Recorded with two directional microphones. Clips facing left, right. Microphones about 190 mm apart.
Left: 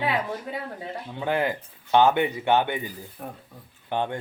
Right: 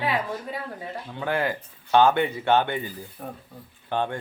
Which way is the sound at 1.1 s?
20° left (ahead or behind).